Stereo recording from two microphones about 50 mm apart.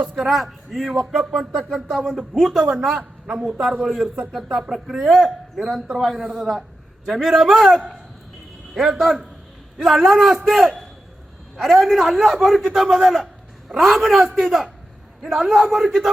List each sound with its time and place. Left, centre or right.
0.2 s speech: centre
2.9 s a woman's voice: right
3.4 s a man's voice: centre
15.2 s a man's voice: centre